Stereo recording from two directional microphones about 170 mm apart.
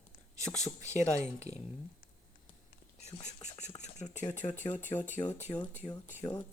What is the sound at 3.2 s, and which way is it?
Speech, 40° left (ahead or behind).